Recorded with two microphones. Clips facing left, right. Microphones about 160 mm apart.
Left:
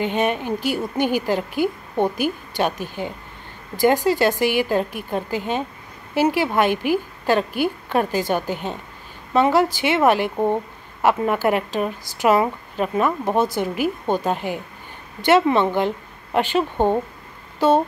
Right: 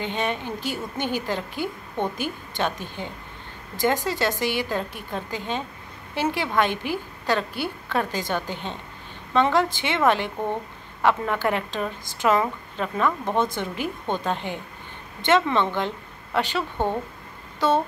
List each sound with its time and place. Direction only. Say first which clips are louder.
0.0 s a woman's voice: left 6 dB; 10° left (ahead or behind)